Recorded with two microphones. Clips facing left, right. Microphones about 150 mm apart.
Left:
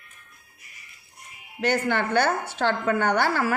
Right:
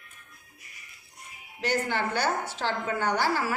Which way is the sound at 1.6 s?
60° left (ahead or behind).